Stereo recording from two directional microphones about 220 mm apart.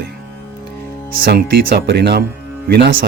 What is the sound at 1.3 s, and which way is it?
Speech, 45° right (ahead or behind).